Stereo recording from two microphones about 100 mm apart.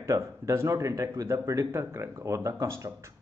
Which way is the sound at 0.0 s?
30° right (ahead or behind).